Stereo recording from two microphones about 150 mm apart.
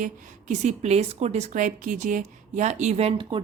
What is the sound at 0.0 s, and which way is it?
A woman's voice, 55° right (ahead or behind).